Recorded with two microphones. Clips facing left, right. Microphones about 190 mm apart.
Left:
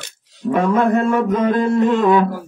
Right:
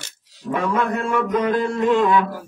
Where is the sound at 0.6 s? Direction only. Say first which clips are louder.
Left 6 dB; 50° left (ahead or behind).